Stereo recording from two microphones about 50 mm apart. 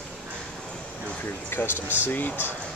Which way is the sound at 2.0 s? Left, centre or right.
Left.